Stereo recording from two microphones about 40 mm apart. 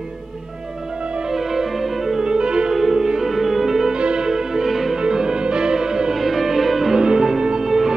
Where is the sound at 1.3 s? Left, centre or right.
Centre.